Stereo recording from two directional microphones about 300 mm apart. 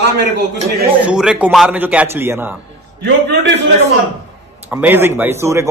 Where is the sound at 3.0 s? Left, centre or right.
Right.